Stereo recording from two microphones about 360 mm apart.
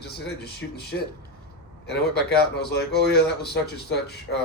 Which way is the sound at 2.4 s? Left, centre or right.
Left.